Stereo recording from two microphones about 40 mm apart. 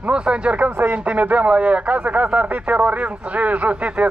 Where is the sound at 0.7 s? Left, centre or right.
Right.